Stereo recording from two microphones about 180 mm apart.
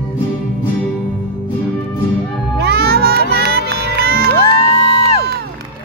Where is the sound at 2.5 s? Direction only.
65° right (ahead or behind).